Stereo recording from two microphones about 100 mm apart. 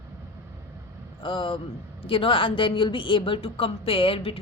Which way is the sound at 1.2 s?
60° left (ahead or behind).